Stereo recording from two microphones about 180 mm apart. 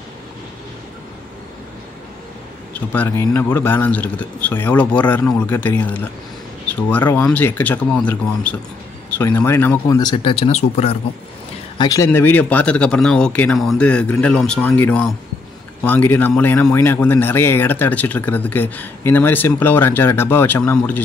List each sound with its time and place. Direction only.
2.7 s speech: 10° left (ahead or behind); by 11.0 s 35° left (ahead or behind)
11.8 s speech: 15° left (ahead or behind)